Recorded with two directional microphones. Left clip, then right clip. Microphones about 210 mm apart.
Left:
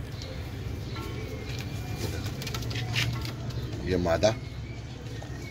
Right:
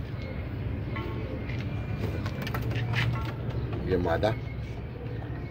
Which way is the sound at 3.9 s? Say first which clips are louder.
Left 2 dB; 30° left (ahead or behind).